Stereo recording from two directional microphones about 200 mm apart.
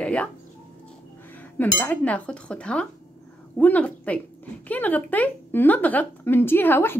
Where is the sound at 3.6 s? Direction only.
5° left (ahead or behind).